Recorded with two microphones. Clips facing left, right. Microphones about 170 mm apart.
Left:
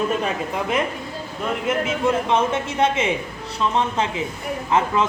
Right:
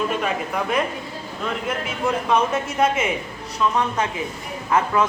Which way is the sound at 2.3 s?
25° left (ahead or behind).